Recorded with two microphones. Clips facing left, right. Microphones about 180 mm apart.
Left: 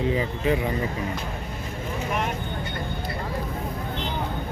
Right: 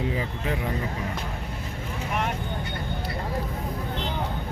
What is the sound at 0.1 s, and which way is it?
Speech, centre (ahead or behind).